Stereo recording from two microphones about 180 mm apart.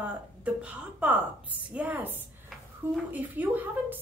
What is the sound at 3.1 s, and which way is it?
Speech, 10° right (ahead or behind).